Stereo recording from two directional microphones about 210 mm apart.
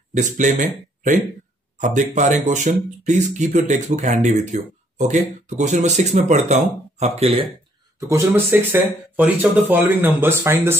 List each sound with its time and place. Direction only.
0.1 s speech: 35° right (ahead or behind)
8.1 s speech: 10° right (ahead or behind)